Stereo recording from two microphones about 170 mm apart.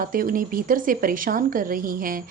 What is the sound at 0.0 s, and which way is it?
Speech, 55° right (ahead or behind).